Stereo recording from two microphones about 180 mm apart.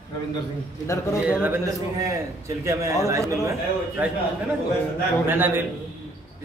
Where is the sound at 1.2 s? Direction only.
10° right (ahead or behind).